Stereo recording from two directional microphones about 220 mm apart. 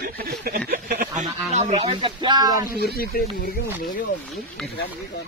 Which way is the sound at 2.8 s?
45° left (ahead or behind).